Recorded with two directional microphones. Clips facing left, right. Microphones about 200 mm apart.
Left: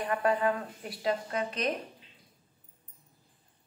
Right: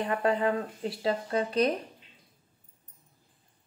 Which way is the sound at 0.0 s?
25° right (ahead or behind).